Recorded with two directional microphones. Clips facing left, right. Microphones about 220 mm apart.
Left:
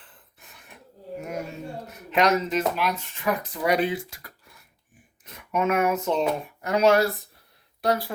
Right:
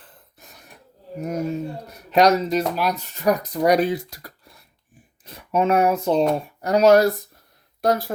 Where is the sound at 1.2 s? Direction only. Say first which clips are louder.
Right 9 dB; 40° right (ahead or behind).